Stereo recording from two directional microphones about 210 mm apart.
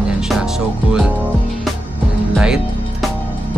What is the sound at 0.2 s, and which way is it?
Music, centre (ahead or behind).